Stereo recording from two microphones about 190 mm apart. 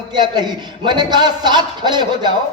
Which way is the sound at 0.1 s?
20° right (ahead or behind).